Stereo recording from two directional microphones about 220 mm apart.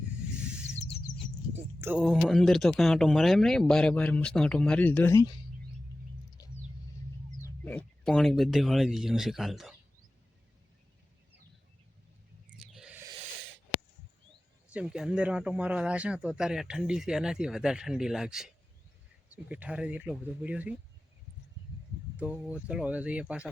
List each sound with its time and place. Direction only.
0.2 s a sound: 5° right (ahead or behind)
1.1 s bird: 90° left
1.8 s speech: 5° right (ahead or behind); by 5.3 s 15° left (ahead or behind)
7.4 s speech: 10° left (ahead or behind)
12.5 s a sound: centre (ahead or behind)
14.7 s speech: 5° right (ahead or behind)
22.2 s speech: 5° right (ahead or behind)